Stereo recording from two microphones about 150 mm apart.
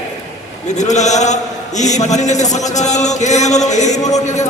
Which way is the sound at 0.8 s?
50° left (ahead or behind).